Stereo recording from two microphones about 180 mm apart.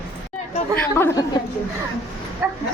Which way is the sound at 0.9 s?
15° left (ahead or behind).